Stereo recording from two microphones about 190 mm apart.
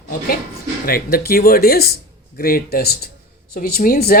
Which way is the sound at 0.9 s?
50° left (ahead or behind).